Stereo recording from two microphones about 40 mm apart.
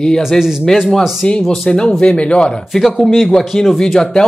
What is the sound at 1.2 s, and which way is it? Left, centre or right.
Speech, left.